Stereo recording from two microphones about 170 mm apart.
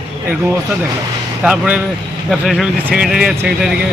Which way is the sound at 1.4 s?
5° right (ahead or behind).